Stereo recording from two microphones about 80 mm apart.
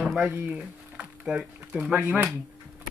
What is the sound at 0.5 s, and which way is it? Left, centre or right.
Speech, centre.